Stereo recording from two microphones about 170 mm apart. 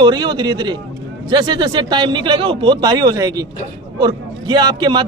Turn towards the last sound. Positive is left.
turn(degrees=-25)  # may be behind; listen again after turning